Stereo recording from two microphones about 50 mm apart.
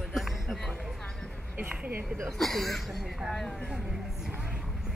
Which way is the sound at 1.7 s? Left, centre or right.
Right.